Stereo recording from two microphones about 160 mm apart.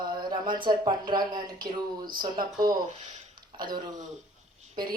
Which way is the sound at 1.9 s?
65° right (ahead or behind).